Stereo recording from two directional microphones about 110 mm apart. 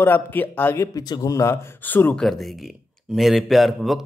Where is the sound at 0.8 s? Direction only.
35° left (ahead or behind); by 2.2 s 15° left (ahead or behind).